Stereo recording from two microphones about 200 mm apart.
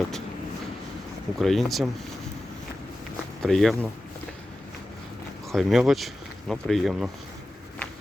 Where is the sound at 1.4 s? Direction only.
Centre (ahead or behind).